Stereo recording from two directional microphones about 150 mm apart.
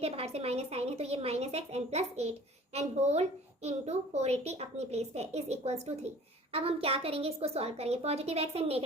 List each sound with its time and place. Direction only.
0.0 s a child's voice: 45° right (ahead or behind)